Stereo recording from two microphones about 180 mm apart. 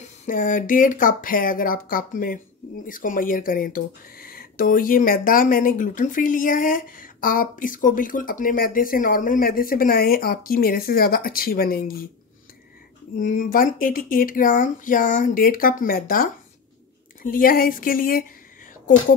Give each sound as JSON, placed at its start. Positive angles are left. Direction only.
{"t": 0.0, "sound": "speech", "side_deg": 45}
{"t": 13.2, "sound": "speech", "side_deg": 45}